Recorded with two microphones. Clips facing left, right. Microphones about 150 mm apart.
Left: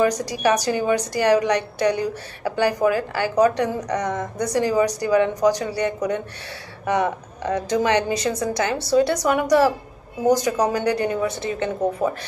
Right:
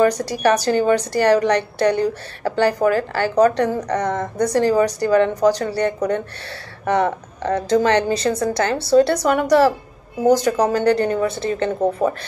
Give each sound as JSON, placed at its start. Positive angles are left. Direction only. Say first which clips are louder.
{"t": 0.2, "sound": "a woman's voice", "louder": "right 3 dB", "side_deg": 15}